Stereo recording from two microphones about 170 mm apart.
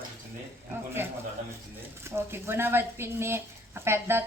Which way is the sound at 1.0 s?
15° right (ahead or behind).